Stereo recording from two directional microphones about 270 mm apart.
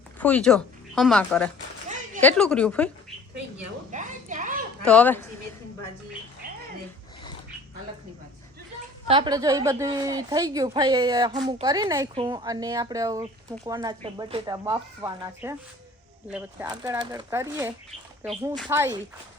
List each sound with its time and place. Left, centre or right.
0.2 s a woman's voice: centre
3.9 s a sound: right
4.9 s a woman's voice: centre
9.0 s a woman's voice: centre